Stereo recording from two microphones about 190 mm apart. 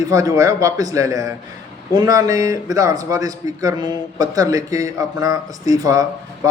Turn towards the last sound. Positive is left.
turn(degrees=-15)  # may be behind; listen again after turning